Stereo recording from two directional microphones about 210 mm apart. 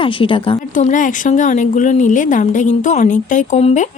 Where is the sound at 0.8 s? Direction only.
35° left (ahead or behind).